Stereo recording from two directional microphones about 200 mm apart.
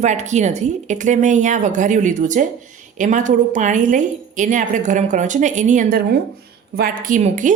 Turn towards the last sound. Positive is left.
turn(degrees=-40)  # may be behind; listen again after turning